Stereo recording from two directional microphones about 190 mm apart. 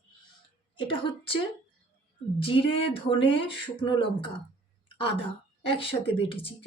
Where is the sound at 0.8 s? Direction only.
25° left (ahead or behind).